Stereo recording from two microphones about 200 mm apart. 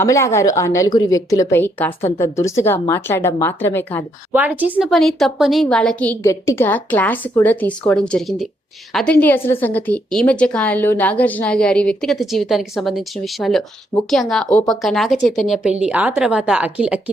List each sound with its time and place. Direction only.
0.0 s a woman's voice: 15° left (ahead or behind)
4.3 s a woman's voice: 10° right (ahead or behind)